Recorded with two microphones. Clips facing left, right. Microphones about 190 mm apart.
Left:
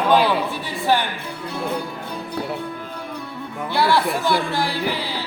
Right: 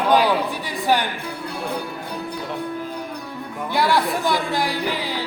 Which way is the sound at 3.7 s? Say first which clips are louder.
Left 1 dB; 15° right (ahead or behind).